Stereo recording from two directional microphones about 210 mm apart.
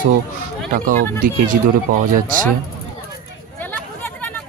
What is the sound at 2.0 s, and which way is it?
Speech, 40° right (ahead or behind).